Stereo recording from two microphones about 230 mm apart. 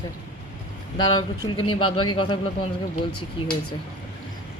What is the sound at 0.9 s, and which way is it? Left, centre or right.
Speech, centre.